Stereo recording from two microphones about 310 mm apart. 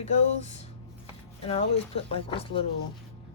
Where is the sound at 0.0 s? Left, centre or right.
Left.